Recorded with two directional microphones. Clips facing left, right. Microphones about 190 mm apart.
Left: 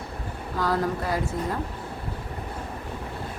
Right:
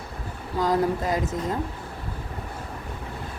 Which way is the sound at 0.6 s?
20° right (ahead or behind).